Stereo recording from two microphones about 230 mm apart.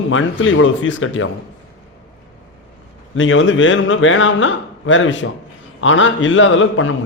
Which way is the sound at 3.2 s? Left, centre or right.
Left.